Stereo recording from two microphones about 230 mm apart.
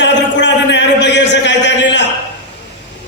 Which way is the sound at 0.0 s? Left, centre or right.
Left.